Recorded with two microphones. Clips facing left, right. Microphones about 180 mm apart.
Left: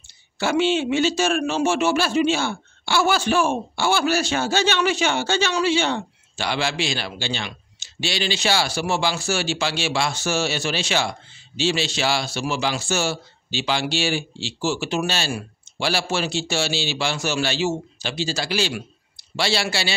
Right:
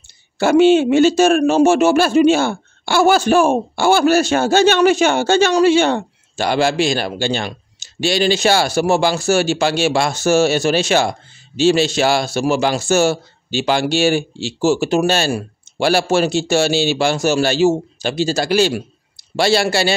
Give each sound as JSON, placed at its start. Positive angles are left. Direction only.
{"t": 0.4, "sound": "a man's voice", "side_deg": -50}